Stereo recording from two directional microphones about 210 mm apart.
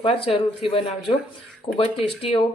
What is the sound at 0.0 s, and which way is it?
Speech, 25° left (ahead or behind).